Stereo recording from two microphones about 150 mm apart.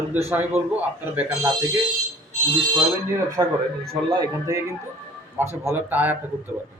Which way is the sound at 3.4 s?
25° right (ahead or behind).